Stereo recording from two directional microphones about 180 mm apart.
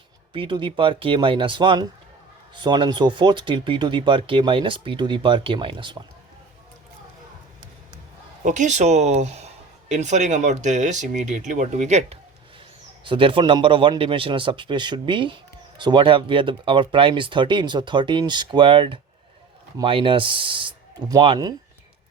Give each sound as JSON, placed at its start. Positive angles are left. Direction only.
{"t": 0.3, "sound": "speech", "side_deg": -30}
{"t": 8.4, "sound": "speech", "side_deg": -40}